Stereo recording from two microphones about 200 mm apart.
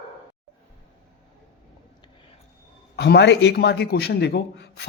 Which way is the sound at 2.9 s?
55° left (ahead or behind).